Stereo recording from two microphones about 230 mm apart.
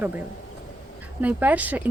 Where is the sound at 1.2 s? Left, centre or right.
Centre.